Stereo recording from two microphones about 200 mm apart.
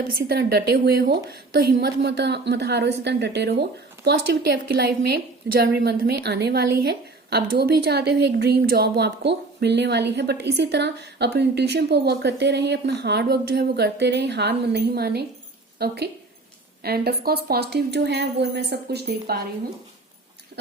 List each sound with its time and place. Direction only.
0.3 s a woman's voice: 50° right (ahead or behind)